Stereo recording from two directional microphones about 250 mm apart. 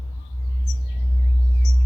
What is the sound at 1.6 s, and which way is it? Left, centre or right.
Music, right.